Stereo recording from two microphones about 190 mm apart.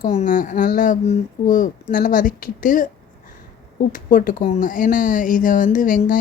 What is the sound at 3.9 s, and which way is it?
Speech, 45° left (ahead or behind).